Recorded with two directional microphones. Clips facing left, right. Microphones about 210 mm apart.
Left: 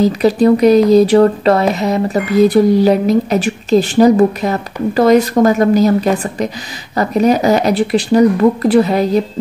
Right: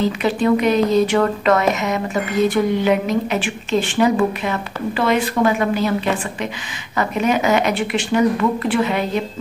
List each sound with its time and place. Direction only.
0.0 s speech: 35° left (ahead or behind)